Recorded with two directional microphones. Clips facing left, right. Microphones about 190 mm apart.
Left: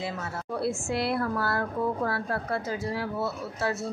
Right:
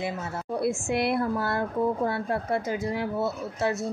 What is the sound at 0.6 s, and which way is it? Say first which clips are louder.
A woman's voice: right 3 dB; 20° right (ahead or behind).